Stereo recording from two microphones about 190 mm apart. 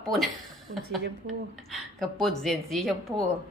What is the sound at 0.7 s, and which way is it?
Speech, 45° right (ahead or behind).